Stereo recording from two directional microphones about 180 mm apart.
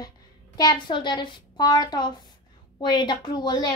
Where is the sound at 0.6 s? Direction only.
25° left (ahead or behind).